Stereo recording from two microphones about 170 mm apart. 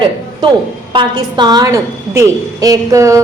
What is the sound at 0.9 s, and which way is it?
A woman's voice, 25° right (ahead or behind).